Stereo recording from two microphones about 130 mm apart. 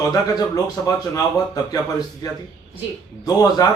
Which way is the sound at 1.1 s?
30° left (ahead or behind).